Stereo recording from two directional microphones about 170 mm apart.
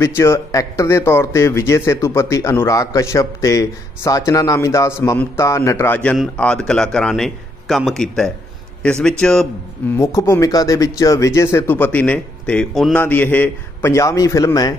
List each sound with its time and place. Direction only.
0.0 s speech: 15° left (ahead or behind)
9.9 s speech: 15° left (ahead or behind)